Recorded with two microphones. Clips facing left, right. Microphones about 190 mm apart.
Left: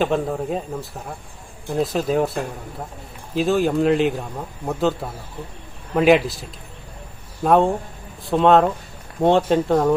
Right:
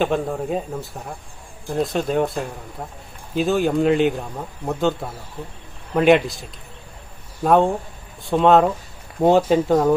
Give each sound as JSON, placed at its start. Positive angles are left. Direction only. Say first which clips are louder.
{"t": 0.0, "sound": "speech", "louder": "even", "side_deg": 0}
{"t": 7.4, "sound": "speech", "louder": "even", "side_deg": 0}